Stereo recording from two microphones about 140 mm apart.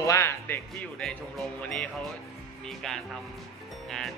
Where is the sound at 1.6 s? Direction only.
5° left (ahead or behind).